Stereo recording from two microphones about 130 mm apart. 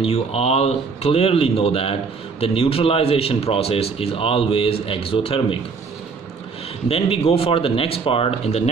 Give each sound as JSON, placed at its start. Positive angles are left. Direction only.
{"t": 0.0, "sound": "speech", "side_deg": 50}
{"t": 6.9, "sound": "speech", "side_deg": 50}